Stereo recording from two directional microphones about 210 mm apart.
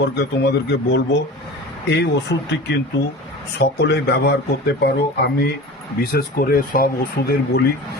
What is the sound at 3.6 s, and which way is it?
Speech, 50° left (ahead or behind).